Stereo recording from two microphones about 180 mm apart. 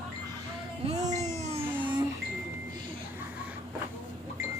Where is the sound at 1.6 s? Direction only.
10° right (ahead or behind).